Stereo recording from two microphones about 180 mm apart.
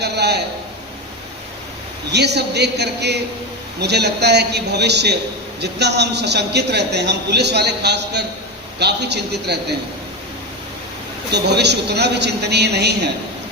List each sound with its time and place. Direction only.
0.0 s a man's voice: 65° right (ahead or behind)
2.1 s a man's voice: 65° right (ahead or behind)
11.3 s a man's voice: 70° right (ahead or behind)